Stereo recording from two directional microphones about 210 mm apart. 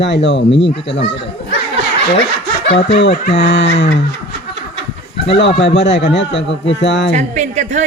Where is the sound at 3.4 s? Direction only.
60° left (ahead or behind).